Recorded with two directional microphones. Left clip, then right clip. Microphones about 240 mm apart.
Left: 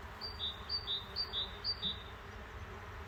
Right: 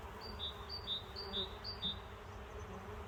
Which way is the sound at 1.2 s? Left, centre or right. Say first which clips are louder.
Left 7 dB; right.